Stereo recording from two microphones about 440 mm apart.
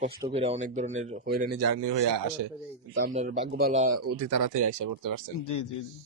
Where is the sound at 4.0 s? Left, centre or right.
Right.